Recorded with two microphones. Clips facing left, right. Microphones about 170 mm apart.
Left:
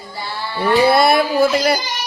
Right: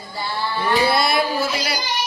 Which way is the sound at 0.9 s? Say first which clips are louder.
Left 6 dB; 55° left (ahead or behind).